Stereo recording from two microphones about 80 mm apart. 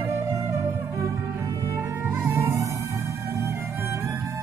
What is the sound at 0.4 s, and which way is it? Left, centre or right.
Music, right.